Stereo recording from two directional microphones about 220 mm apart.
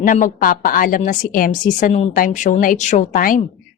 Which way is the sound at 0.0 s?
35° left (ahead or behind).